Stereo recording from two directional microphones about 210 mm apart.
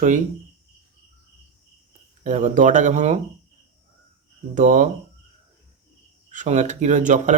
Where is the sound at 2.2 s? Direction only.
35° right (ahead or behind).